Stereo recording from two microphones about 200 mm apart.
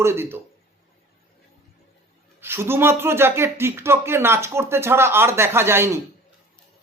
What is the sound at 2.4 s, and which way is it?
Speech, 10° right (ahead or behind).